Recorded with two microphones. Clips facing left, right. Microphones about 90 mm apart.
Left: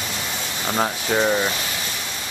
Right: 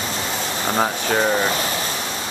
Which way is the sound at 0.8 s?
10° right (ahead or behind).